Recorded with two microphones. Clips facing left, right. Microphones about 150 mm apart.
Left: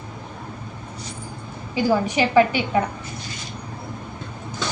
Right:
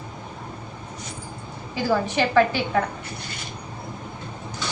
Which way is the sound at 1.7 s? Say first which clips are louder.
Left 3 dB; 15° left (ahead or behind).